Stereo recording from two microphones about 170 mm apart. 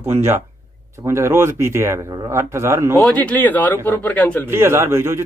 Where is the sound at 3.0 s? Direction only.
10° left (ahead or behind).